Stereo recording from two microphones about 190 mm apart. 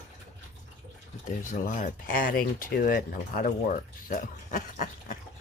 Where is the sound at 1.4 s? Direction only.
45° left (ahead or behind).